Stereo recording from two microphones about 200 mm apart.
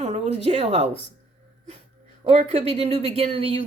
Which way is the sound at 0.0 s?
35° right (ahead or behind).